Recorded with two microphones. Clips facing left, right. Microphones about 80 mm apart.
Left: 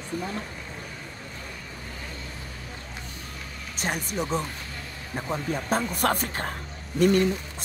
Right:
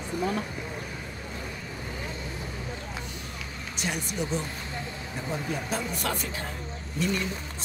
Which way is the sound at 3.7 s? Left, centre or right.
Left.